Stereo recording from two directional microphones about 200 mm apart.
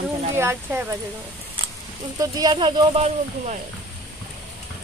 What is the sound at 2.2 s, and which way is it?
Speech, 20° right (ahead or behind).